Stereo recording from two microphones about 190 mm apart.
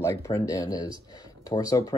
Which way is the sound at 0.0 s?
15° left (ahead or behind).